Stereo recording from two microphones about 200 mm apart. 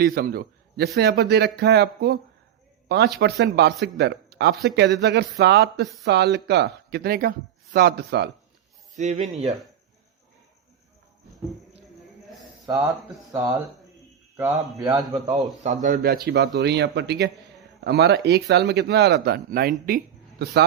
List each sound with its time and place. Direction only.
0.0 s a man's voice: 50° right (ahead or behind)
3.2 s speech: 55° right (ahead or behind)
9.0 s speech: 35° right (ahead or behind)
12.6 s speech: 15° right (ahead or behind)
14.3 s speech: 15° right (ahead or behind)
15.4 s a man's voice: centre (ahead or behind)
15.6 s speech: 40° right (ahead or behind); by 20.7 s 55° right (ahead or behind)